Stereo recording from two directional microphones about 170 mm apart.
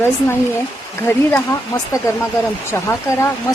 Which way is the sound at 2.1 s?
15° left (ahead or behind).